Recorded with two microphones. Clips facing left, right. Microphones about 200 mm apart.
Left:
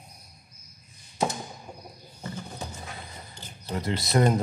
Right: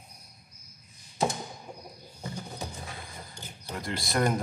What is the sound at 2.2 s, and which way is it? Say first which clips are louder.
Music: left 1 dB; 15° right (ahead or behind).